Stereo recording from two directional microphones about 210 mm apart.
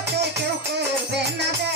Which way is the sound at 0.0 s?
50° right (ahead or behind).